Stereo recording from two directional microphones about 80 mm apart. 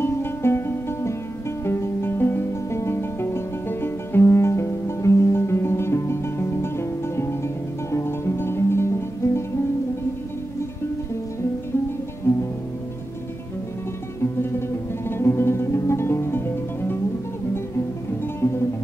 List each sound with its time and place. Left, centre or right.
0.0 s music: left
14.2 s music: left
18.4 s music: left